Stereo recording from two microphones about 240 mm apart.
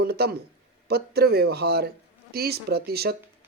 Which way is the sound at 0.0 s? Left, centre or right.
Right.